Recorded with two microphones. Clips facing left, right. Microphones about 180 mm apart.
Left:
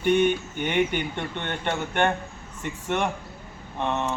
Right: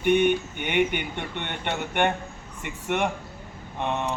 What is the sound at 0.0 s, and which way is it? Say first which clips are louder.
Speech: even; 15° right (ahead or behind).